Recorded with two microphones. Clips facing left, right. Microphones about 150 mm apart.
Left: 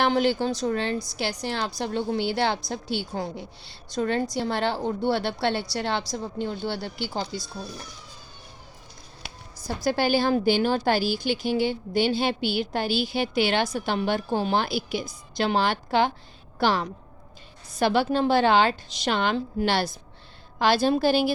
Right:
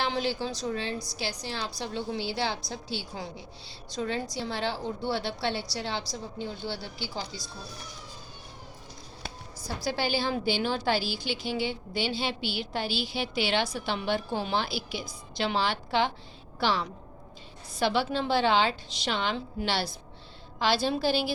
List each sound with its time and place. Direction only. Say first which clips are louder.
0.0 s a woman's voice: left 7 dB; 60° left (ahead or behind)
9.6 s a woman's voice: left 6 dB; 50° left (ahead or behind)